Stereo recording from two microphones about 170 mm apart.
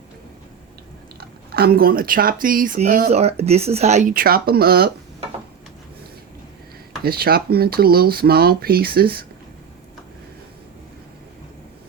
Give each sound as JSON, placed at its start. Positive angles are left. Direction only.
{"t": 1.2, "sound": "speech", "side_deg": -65}
{"t": 3.1, "sound": "speech", "side_deg": -40}
{"t": 4.1, "sound": "speech", "side_deg": -60}
{"t": 7.0, "sound": "speech", "side_deg": -65}